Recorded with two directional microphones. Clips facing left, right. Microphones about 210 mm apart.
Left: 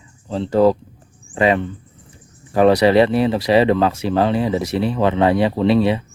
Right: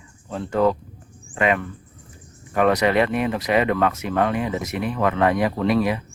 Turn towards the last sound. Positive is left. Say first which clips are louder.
# left 5 dB
turn(degrees=30)  # may be behind; listen again after turning